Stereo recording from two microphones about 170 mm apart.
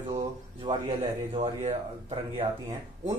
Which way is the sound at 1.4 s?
40° right (ahead or behind).